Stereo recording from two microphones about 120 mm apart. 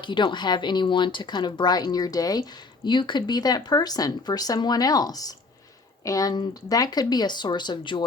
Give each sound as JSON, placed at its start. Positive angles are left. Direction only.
{"t": 0.0, "sound": "speech", "side_deg": 40}